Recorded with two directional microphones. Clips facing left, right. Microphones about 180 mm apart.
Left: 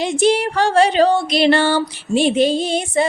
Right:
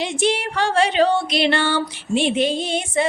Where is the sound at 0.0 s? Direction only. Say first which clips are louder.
Left 5 dB; 40° left (ahead or behind).